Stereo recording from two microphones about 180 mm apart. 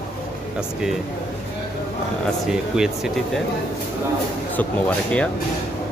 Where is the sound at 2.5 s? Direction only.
5° right (ahead or behind).